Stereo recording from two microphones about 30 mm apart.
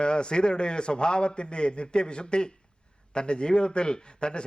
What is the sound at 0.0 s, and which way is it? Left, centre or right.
Speech, left.